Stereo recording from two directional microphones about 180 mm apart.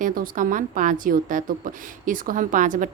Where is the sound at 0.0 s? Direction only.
50° right (ahead or behind).